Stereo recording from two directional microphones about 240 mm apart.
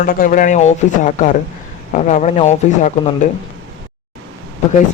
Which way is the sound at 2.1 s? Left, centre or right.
Left.